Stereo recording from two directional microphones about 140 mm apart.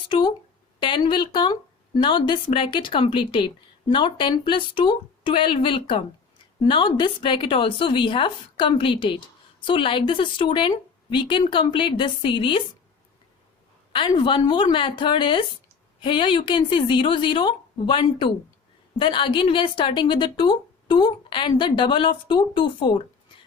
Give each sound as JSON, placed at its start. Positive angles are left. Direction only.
{"t": 0.1, "sound": "a woman's voice", "side_deg": 35}
{"t": 13.9, "sound": "a woman's voice", "side_deg": 35}